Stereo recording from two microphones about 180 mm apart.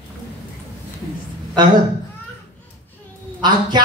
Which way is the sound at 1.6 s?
25° right (ahead or behind).